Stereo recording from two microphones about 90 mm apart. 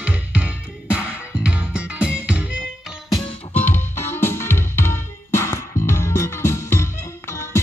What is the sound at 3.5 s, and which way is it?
Music, 20° left (ahead or behind).